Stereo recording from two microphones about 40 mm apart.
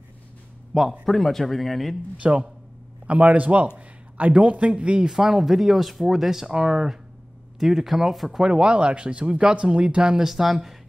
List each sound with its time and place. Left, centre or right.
1.0 s speech: centre
2.1 s a man's voice: right
5.0 s speech: centre
8.4 s speech: right
10.1 s speech: centre